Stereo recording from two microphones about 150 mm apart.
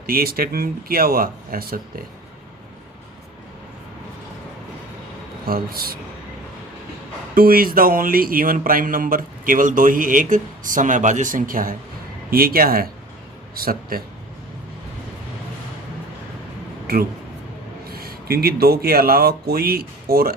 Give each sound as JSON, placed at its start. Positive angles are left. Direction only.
{"t": 0.0, "sound": "speech", "side_deg": -80}
{"t": 5.5, "sound": "speech", "side_deg": -80}
{"t": 7.3, "sound": "speech", "side_deg": -75}
{"t": 12.3, "sound": "speech", "side_deg": -80}
{"t": 16.8, "sound": "speech", "side_deg": -75}
{"t": 17.9, "sound": "speech", "side_deg": -90}